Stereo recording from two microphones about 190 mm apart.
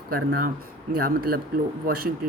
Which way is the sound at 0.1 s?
50° right (ahead or behind).